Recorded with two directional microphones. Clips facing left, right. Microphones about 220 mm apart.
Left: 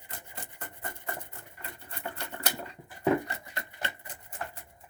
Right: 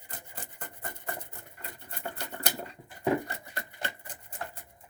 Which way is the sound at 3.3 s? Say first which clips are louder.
Even; 35° right (ahead or behind).